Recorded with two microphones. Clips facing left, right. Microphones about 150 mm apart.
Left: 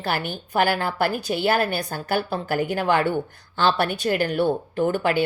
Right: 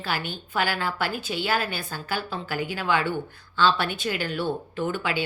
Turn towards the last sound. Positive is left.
turn(degrees=45)  # may be behind; listen again after turning